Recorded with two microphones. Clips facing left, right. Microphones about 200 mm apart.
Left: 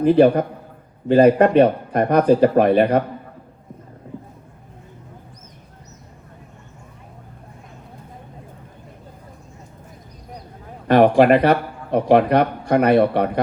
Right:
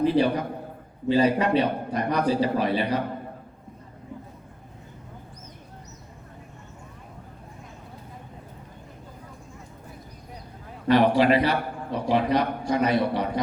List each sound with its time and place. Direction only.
0.0 s a man's voice: 50° left (ahead or behind)
10.8 s speech: 50° left (ahead or behind)